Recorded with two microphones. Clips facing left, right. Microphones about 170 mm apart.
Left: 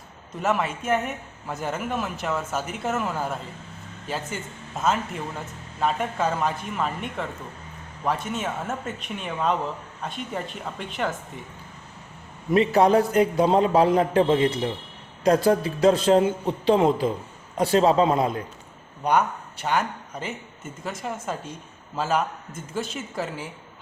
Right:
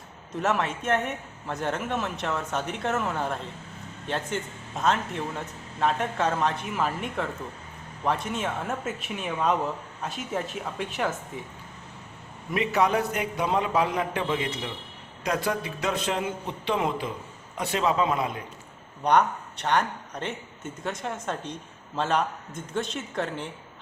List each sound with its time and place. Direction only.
0.3 s a man's voice: centre (ahead or behind)
12.5 s a man's voice: 35° left (ahead or behind)
19.0 s a man's voice: 5° left (ahead or behind)